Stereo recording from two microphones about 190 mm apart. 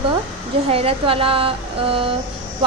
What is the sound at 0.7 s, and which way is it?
A woman's voice, 30° right (ahead or behind).